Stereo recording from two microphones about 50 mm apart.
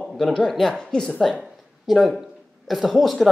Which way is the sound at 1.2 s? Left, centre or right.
Centre.